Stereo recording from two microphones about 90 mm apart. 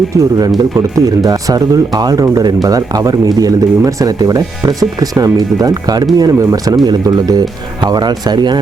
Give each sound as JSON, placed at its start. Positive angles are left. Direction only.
{"t": 0.1, "sound": "speech", "side_deg": -45}